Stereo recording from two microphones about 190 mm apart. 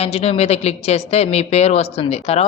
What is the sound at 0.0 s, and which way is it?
A woman's voice, 35° left (ahead or behind).